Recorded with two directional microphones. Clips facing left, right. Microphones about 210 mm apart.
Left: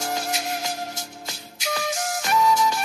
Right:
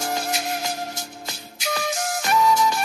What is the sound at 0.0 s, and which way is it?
Music, 55° right (ahead or behind).